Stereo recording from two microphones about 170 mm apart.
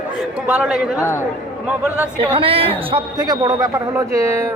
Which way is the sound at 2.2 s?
30° right (ahead or behind).